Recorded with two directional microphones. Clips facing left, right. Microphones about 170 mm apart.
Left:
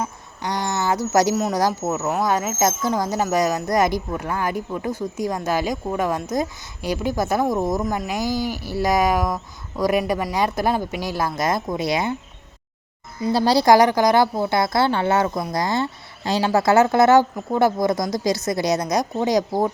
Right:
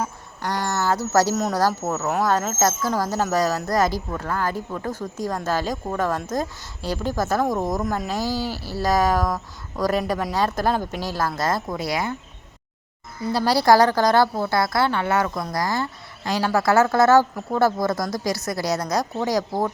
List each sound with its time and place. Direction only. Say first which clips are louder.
0.4 s a sound: even; 15° left (ahead or behind)
1.5 s speech: left 1 dB; 15° left (ahead or behind)
13.2 s a woman's voice: left 2 dB; 25° left (ahead or behind)